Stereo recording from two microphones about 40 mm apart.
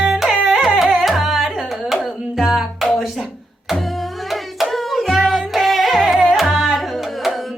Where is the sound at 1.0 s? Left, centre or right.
Centre.